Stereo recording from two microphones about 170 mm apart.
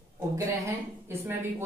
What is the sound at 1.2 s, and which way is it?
Speech, 15° right (ahead or behind).